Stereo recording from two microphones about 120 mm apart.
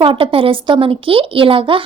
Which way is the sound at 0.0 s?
45° right (ahead or behind).